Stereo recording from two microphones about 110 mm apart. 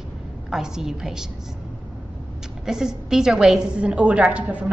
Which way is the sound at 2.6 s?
5° right (ahead or behind).